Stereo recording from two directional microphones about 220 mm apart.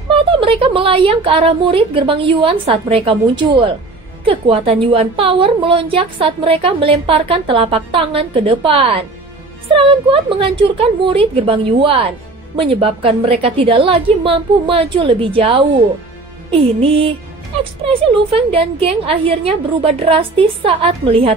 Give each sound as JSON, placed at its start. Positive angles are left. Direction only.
{"t": 0.1, "sound": "a woman's voice", "side_deg": -25}
{"t": 18.3, "sound": "a woman's voice", "side_deg": -25}